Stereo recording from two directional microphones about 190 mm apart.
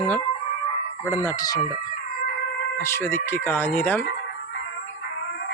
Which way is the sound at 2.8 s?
15° left (ahead or behind).